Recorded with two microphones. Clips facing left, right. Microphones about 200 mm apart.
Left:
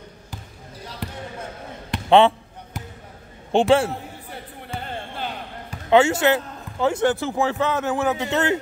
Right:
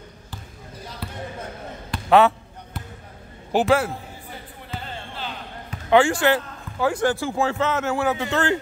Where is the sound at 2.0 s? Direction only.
25° left (ahead or behind).